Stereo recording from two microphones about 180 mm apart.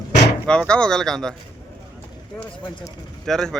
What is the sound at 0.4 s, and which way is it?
Speech, 5° left (ahead or behind).